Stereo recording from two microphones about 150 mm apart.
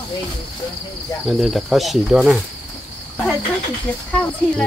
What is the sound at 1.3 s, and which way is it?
Speech, centre (ahead or behind).